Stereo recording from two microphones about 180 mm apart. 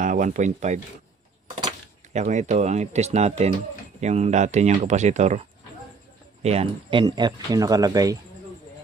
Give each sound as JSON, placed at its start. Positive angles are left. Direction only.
{"t": 0.0, "sound": "speech", "side_deg": -45}
{"t": 2.1, "sound": "speech", "side_deg": -40}
{"t": 6.4, "sound": "speech", "side_deg": -35}